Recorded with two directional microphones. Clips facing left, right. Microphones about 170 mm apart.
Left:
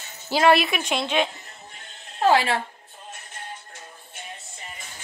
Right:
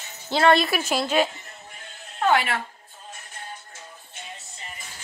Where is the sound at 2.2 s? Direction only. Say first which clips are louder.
Left 2 dB; 30° left (ahead or behind).